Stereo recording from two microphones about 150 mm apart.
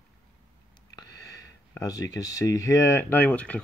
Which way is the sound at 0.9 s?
25° left (ahead or behind).